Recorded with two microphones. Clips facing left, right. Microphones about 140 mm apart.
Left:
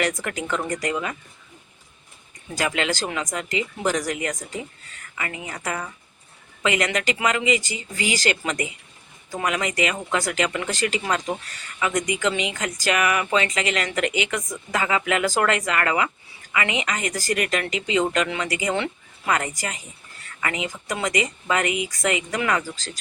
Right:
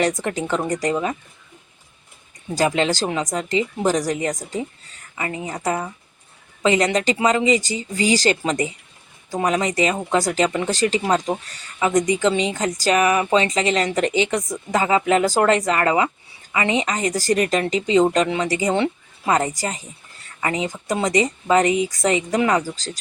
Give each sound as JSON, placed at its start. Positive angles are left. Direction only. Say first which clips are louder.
{"t": 0.1, "sound": "speech", "louder": "right 4 dB", "side_deg": -20}
{"t": 2.6, "sound": "a woman's voice", "louder": "right 5 dB", "side_deg": -30}